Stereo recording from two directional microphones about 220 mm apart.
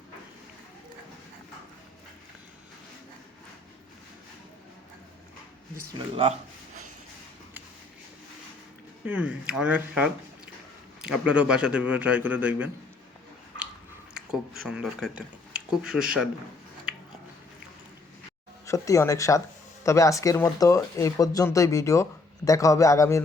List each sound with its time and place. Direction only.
9.0 s a man's voice: 5° right (ahead or behind)
14.1 s speech: centre (ahead or behind)
18.6 s speech: 15° left (ahead or behind)